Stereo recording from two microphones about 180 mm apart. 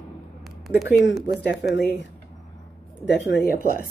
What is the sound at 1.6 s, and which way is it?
Speech, 65° left (ahead or behind).